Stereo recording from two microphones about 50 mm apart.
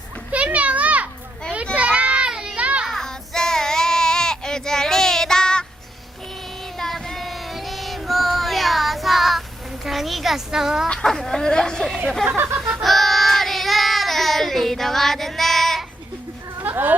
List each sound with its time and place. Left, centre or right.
0.3 s children playing: right
2.3 s children playing: centre
2.6 s a sound: right
2.8 s child singing: centre
3.1 s child singing: centre
6.7 s child singing: centre
9.8 s a sound: centre
10.8 s speech: centre
12.5 s music: right
12.8 s child singing: centre
16.6 s a sound: right